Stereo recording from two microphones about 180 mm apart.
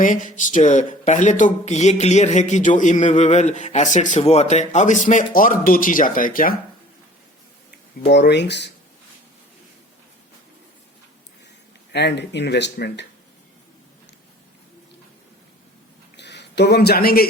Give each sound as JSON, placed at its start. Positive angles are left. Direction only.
{"t": 0.0, "sound": "speech", "side_deg": 45}
{"t": 8.1, "sound": "speech", "side_deg": 70}
{"t": 11.9, "sound": "speech", "side_deg": 70}
{"t": 16.1, "sound": "a sound", "side_deg": 75}